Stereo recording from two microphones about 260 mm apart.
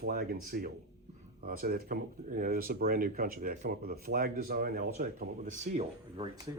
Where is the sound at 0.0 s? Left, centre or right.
Right.